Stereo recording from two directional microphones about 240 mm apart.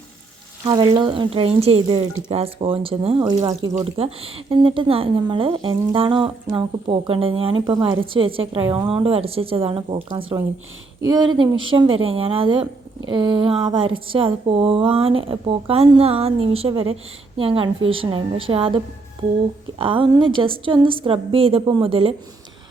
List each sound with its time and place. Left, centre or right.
0.6 s speech: centre
19.8 s speech: right